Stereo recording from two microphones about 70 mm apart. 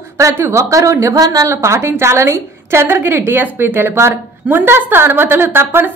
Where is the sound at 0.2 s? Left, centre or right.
Right.